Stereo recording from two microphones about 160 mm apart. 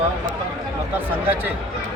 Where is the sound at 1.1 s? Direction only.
10° right (ahead or behind).